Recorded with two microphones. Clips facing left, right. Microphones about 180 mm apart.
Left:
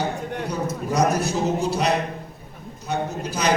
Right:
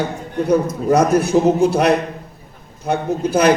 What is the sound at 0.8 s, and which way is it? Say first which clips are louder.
A man's voice: right 5 dB; 55° right (ahead or behind).